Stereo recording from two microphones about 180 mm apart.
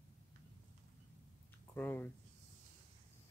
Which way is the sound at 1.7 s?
10° left (ahead or behind).